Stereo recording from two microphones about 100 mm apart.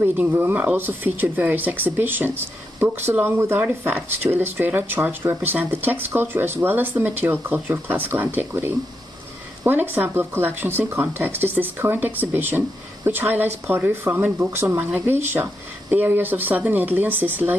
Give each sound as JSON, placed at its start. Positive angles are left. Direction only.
{"t": 0.0, "sound": "speech", "side_deg": -20}